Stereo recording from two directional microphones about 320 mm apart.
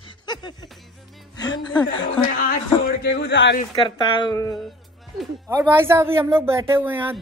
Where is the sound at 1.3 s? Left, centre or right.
Centre.